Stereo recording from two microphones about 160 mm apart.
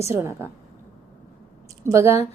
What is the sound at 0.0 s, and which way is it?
Speech, 15° right (ahead or behind).